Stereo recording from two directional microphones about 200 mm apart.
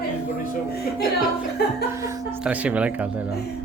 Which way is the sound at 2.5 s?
5° right (ahead or behind).